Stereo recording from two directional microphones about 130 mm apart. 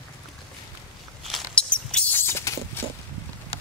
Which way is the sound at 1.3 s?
10° left (ahead or behind).